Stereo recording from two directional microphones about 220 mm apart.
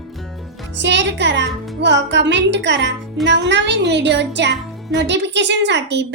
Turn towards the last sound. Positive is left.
turn(degrees=-50)  # may be behind; listen again after turning